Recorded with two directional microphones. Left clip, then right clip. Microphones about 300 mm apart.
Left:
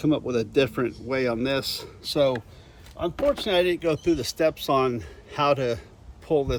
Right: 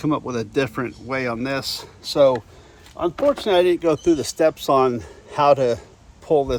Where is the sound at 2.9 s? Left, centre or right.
Centre.